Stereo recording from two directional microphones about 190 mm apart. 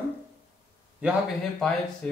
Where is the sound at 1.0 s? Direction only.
Centre (ahead or behind).